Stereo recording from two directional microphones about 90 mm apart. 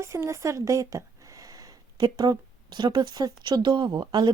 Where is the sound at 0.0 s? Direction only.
30° right (ahead or behind).